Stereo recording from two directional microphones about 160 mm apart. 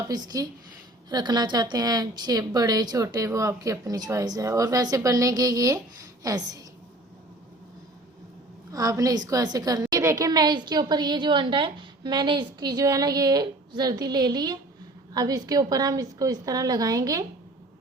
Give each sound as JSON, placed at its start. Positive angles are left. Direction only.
{"t": 0.1, "sound": "a woman's voice", "side_deg": -25}
{"t": 8.7, "sound": "a woman's voice", "side_deg": -20}